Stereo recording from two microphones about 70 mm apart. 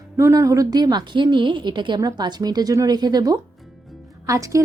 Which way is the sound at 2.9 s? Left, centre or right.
Right.